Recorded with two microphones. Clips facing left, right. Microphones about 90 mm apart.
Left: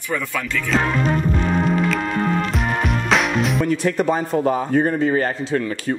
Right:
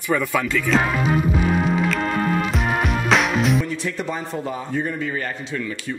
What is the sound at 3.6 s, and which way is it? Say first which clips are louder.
Speech: left 7 dB; 50° left (ahead or behind).